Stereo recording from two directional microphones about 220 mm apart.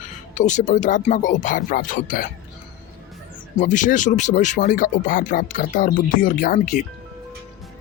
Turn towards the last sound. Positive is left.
turn(degrees=35)  # may be behind; listen again after turning